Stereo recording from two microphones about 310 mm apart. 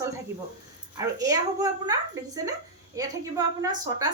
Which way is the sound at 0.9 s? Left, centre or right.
Centre.